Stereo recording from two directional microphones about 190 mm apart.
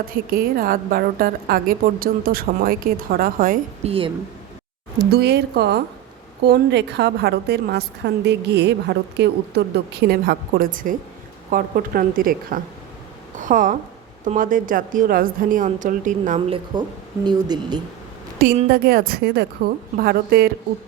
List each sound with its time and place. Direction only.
0.3 s a woman's voice: 50° right (ahead or behind)
3.8 s speech: 30° right (ahead or behind)
4.9 s a woman's voice: 60° right (ahead or behind); by 16.4 s 40° right (ahead or behind)
16.7 s speech: 20° right (ahead or behind)
18.7 s a woman's voice: 50° right (ahead or behind)